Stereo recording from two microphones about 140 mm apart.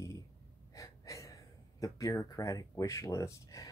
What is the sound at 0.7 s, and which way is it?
Speech, 25° left (ahead or behind).